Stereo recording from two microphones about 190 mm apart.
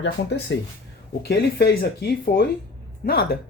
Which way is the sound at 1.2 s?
55° left (ahead or behind).